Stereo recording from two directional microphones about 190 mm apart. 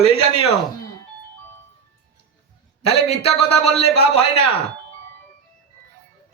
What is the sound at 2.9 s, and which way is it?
A man's voice, 30° left (ahead or behind).